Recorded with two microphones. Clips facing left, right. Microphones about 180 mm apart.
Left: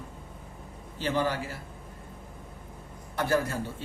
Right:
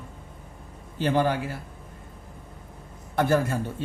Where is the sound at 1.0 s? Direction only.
55° right (ahead or behind).